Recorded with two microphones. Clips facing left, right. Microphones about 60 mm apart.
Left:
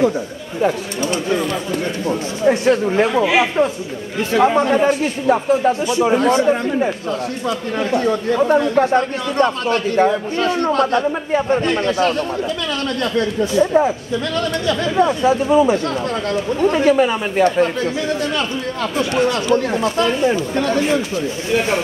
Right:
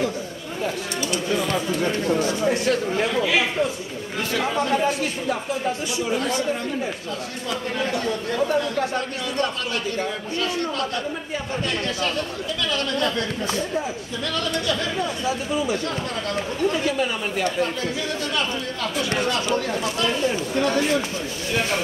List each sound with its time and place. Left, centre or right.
1.0 s speech: left
7.9 s speech: left
13.6 s speech: left
15.0 s speech: left
18.8 s speech: left